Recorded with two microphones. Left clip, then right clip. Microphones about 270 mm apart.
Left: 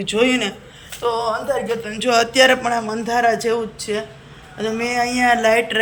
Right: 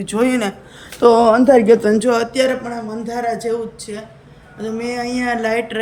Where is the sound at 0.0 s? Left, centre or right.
Centre.